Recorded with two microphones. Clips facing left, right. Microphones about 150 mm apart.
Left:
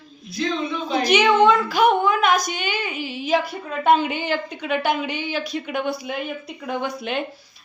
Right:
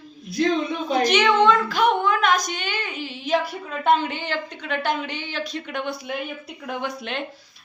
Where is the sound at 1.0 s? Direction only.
10° left (ahead or behind).